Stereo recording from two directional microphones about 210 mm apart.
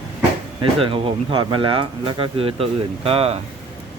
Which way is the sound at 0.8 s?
25° right (ahead or behind).